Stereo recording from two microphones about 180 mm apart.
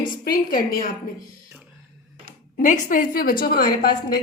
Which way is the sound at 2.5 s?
45° left (ahead or behind).